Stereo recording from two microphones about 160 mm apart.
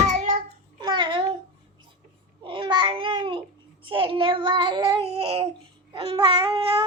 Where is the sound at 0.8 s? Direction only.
30° right (ahead or behind).